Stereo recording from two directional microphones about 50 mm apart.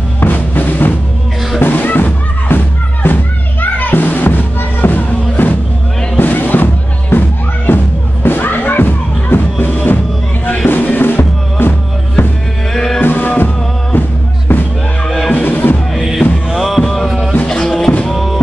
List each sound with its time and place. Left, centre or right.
0.2 s music: left
12.7 s music: centre
13.0 s music: left
13.9 s music: left
15.0 s music: centre
15.3 s music: left
15.9 s music: centre
16.4 s a sound: centre
17.5 s music: centre
18.0 s music: centre